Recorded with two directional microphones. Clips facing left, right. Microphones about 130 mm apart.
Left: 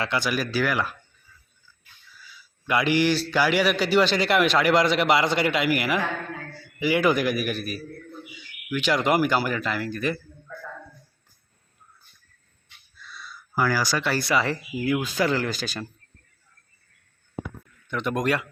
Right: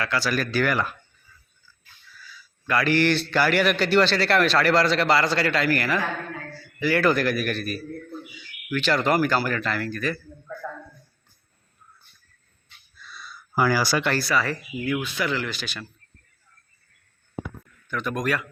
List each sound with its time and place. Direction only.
0.0 s speech: 20° left (ahead or behind)
0.3 s speech: 10° left (ahead or behind)
2.2 s a man's voice: 20° left (ahead or behind)
13.6 s speech: 10° right (ahead or behind)
14.2 s speech: 25° left (ahead or behind); by 15.9 s 40° left (ahead or behind)
17.8 s speech: 25° left (ahead or behind)